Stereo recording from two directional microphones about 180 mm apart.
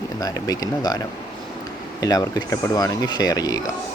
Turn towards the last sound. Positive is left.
turn(degrees=20)  # may be behind; listen again after turning